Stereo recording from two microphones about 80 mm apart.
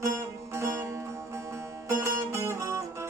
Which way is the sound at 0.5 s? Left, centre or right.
Right.